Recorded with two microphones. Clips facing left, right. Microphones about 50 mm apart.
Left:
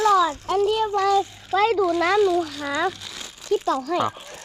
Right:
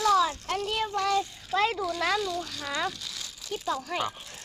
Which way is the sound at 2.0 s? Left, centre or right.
Left.